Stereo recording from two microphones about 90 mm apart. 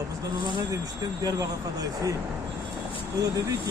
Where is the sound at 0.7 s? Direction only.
45° right (ahead or behind).